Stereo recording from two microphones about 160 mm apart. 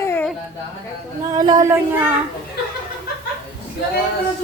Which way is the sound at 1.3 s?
25° right (ahead or behind).